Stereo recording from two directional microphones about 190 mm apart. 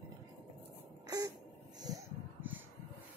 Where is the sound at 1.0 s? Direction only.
20° right (ahead or behind).